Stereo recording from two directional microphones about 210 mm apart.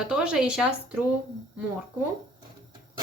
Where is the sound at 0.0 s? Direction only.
5° right (ahead or behind).